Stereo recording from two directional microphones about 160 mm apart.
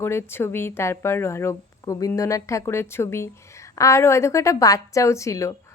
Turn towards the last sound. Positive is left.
turn(degrees=20)  # may be behind; listen again after turning